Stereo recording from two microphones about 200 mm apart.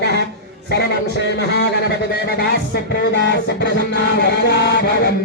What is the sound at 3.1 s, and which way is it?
Speech, 60° left (ahead or behind).